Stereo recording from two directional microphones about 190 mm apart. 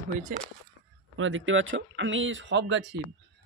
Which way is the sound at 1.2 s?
90° right.